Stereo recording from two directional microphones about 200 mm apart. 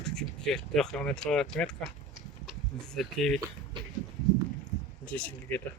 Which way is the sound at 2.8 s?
5° left (ahead or behind).